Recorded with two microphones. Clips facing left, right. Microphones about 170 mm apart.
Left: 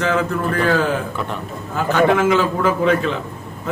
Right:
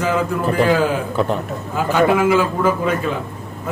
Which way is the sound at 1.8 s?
10° right (ahead or behind).